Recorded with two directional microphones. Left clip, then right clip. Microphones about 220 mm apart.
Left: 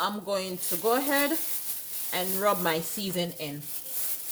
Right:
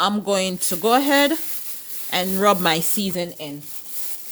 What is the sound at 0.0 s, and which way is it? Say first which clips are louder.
Speech: right 9 dB; 50° right (ahead or behind).